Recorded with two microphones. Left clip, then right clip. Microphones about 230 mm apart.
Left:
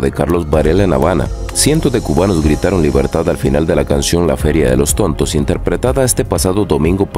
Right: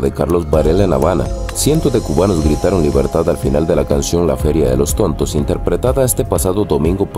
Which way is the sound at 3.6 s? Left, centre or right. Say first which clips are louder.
Even; left.